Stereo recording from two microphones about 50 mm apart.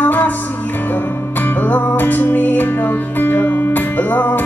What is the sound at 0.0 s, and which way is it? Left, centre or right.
Music, left.